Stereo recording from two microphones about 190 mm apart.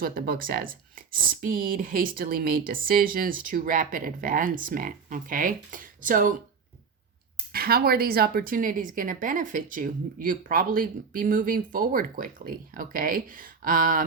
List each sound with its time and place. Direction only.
0.0 s a woman's voice: 50° right (ahead or behind)
7.5 s a woman's voice: 55° right (ahead or behind)